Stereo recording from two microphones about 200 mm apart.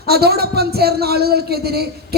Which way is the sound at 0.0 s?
50° right (ahead or behind).